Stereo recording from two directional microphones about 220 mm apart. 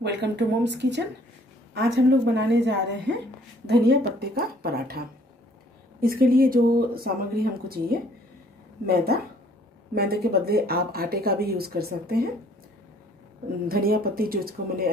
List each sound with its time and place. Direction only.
0.0 s speech: 50° right (ahead or behind)
2.3 s speech: 50° right (ahead or behind)
13.7 s speech: 45° right (ahead or behind)